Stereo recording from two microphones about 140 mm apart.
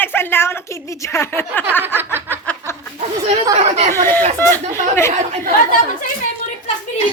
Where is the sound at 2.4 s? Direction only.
10° left (ahead or behind).